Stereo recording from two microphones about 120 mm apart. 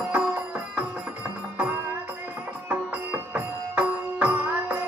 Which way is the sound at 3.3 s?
15° right (ahead or behind).